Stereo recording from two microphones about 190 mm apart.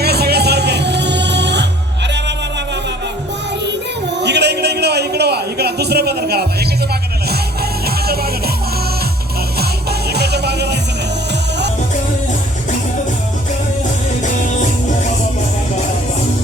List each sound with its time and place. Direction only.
0.0 s music: 55° right (ahead or behind)
4.2 s a sound: 65° right (ahead or behind)
7.9 s music: 55° right (ahead or behind)
10.1 s music: 60° right (ahead or behind)